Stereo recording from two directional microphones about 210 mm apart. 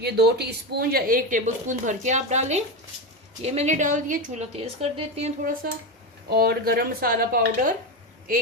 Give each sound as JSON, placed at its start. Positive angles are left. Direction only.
{"t": 0.0, "sound": "a woman's voice", "side_deg": -50}
{"t": 6.3, "sound": "speech", "side_deg": -45}